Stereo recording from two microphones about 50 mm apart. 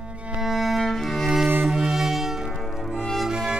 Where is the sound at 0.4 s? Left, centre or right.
Centre.